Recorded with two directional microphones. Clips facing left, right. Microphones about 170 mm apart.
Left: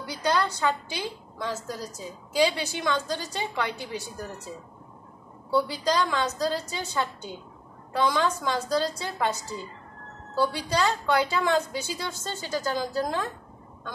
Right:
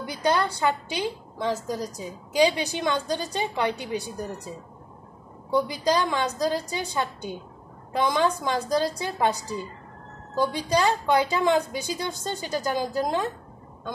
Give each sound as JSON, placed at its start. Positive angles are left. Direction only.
{"t": 0.0, "sound": "a woman's voice", "side_deg": -15}